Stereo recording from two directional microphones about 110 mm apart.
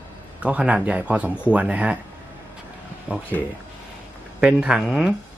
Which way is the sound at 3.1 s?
15° right (ahead or behind).